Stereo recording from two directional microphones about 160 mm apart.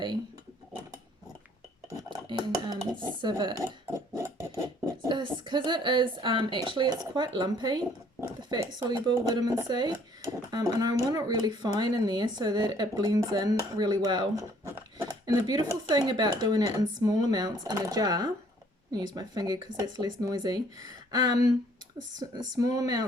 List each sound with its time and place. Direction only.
2.0 s dishes: 30° right (ahead or behind)
4.1 s a sound: 20° right (ahead or behind)
5.0 s speech: 30° right (ahead or behind)